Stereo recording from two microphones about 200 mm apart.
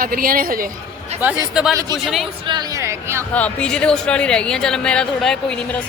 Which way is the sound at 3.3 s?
5° left (ahead or behind).